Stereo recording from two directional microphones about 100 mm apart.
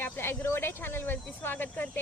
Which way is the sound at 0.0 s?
25° left (ahead or behind).